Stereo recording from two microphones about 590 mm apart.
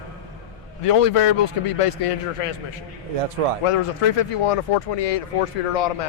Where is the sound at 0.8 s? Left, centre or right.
Left.